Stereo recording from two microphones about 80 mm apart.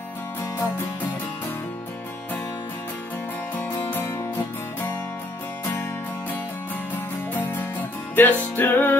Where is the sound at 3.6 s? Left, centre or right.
Left.